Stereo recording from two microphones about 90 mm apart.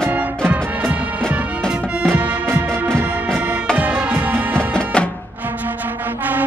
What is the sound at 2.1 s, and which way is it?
Music, 25° right (ahead or behind).